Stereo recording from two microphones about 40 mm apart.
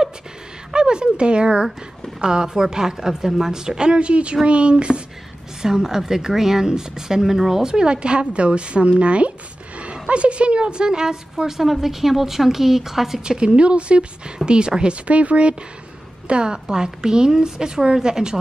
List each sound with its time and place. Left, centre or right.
0.7 s a woman's voice: right
5.6 s a woman's voice: centre
13.2 s speech: right